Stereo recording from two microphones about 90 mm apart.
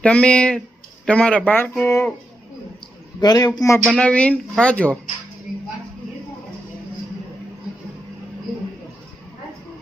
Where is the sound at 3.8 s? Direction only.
10° left (ahead or behind).